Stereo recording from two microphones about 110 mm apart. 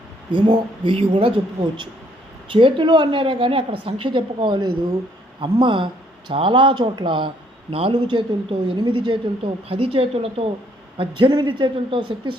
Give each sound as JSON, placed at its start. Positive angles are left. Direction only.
{"t": 0.3, "sound": "a woman's voice", "side_deg": -50}
{"t": 2.5, "sound": "a woman's voice", "side_deg": -50}
{"t": 10.9, "sound": "a woman's voice", "side_deg": -50}